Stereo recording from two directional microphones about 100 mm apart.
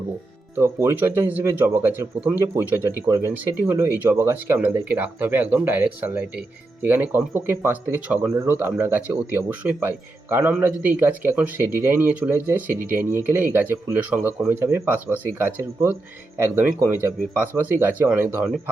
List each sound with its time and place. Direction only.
0.5 s speech: 25° right (ahead or behind)